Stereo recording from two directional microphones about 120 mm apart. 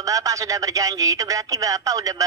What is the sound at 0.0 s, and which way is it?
Speech, 30° right (ahead or behind).